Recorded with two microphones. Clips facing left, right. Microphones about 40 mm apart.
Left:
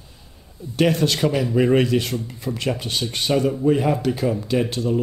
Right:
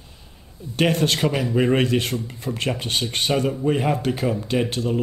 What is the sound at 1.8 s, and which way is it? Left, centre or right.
Speech, right.